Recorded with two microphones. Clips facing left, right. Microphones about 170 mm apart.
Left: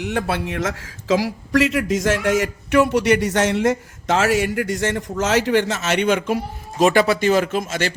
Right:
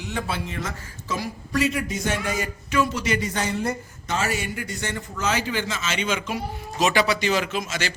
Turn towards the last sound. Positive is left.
turn(degrees=55)  # may be behind; listen again after turning